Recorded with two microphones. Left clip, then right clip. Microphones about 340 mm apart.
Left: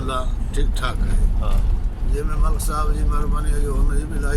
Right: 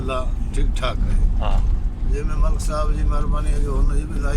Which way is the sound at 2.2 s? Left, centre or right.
Centre.